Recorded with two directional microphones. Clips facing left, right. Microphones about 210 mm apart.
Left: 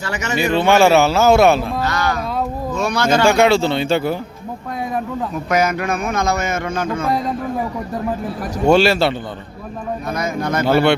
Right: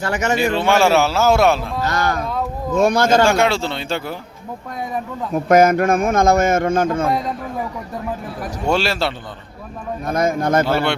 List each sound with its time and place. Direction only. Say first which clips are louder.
0.0 s a man's voice: right 4 dB; 50° right (ahead or behind)
0.3 s a man's voice: left 4 dB; centre (ahead or behind)
1.8 s a sound: even; 50° right (ahead or behind)
2.7 s a man's voice: right 4 dB; 50° right (ahead or behind)
3.3 s a man's voice: left 4 dB; centre (ahead or behind)
5.3 s a man's voice: right 7 dB; 50° right (ahead or behind)
8.7 s a man's voice: left 6 dB; centre (ahead or behind)
10.1 s a man's voice: right 5 dB; 50° right (ahead or behind)